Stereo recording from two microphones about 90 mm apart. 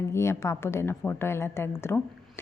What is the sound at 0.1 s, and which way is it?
A woman's voice, 30° left (ahead or behind).